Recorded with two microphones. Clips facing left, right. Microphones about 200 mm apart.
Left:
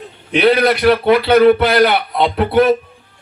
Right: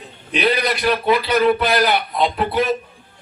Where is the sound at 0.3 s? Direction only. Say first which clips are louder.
Left 7 dB; 60° left (ahead or behind).